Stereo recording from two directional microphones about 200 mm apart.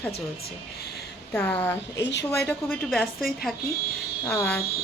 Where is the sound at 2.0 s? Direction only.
60° left (ahead or behind).